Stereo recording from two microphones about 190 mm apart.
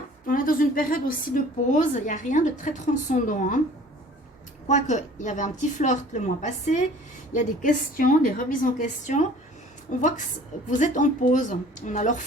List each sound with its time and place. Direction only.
0.3 s a woman's voice: 45° left (ahead or behind)
4.7 s a woman's voice: 40° left (ahead or behind)